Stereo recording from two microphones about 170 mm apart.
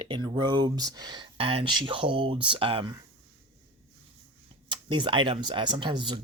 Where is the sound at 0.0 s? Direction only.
25° right (ahead or behind).